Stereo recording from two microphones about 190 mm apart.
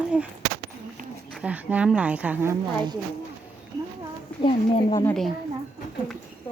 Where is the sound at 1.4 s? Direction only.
5° right (ahead or behind).